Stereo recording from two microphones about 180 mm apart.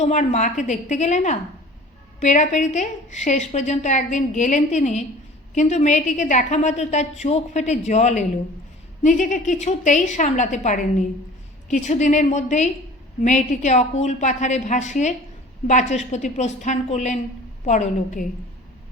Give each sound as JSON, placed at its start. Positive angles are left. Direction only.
{"t": 0.0, "sound": "a woman's voice", "side_deg": 40}